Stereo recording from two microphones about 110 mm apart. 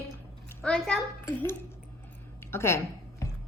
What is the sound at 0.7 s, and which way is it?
Speech, 5° left (ahead or behind).